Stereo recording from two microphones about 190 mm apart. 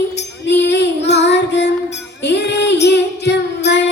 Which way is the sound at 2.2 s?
65° left (ahead or behind).